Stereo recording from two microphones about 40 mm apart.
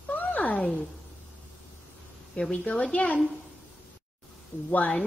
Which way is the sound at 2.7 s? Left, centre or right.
Left.